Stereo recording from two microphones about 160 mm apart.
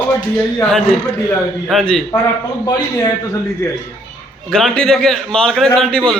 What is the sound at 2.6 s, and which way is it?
A man's voice, 20° left (ahead or behind).